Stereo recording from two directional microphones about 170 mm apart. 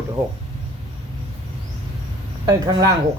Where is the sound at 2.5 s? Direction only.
25° right (ahead or behind).